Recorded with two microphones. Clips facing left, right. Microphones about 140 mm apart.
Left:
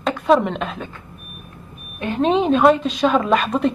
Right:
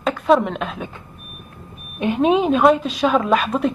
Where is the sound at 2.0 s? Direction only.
20° right (ahead or behind).